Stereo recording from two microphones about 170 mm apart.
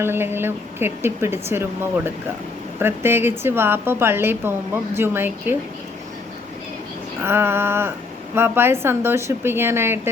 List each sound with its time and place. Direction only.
0.0 s a woman's voice: 15° right (ahead or behind)
2.7 s a woman's voice: 15° right (ahead or behind)
7.2 s a woman's voice: 15° right (ahead or behind)